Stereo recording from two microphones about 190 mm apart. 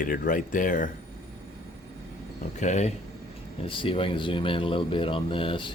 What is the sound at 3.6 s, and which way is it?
Speech, 25° left (ahead or behind).